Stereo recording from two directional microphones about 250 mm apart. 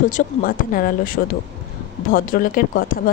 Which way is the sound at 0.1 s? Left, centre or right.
Left.